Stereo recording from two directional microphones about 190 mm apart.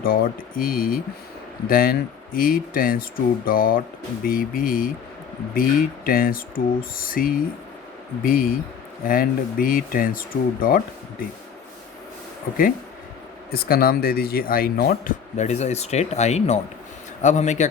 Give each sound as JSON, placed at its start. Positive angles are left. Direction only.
{"t": 0.0, "sound": "speech", "side_deg": 50}
{"t": 13.5, "sound": "speech", "side_deg": 55}
{"t": 15.4, "sound": "speech", "side_deg": 35}